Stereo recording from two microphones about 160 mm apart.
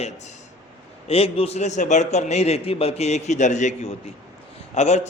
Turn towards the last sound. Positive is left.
turn(degrees=45)  # may be behind; listen again after turning